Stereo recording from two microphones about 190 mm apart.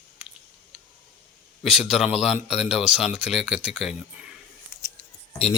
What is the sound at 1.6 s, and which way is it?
Speech, centre (ahead or behind).